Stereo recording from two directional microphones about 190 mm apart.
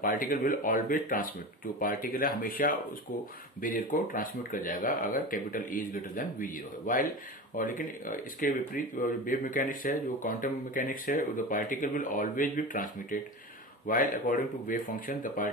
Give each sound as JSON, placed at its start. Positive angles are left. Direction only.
{"t": 0.0, "sound": "speech", "side_deg": 45}